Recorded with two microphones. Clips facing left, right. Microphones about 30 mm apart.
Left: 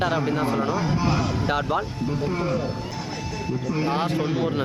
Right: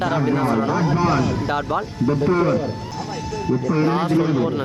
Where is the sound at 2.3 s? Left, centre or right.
Centre.